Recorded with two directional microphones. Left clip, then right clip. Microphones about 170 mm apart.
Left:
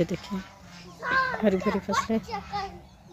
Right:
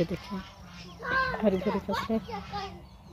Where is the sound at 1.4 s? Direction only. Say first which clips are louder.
Left 1 dB; 10° left (ahead or behind).